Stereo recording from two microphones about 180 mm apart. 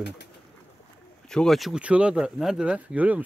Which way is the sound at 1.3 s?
Centre (ahead or behind).